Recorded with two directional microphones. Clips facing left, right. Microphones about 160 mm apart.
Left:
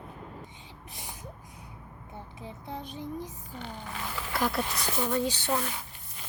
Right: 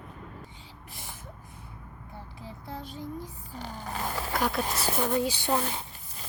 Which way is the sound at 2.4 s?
20° left (ahead or behind).